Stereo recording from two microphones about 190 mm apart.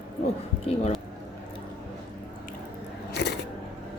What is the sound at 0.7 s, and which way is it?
Speech, 35° left (ahead or behind).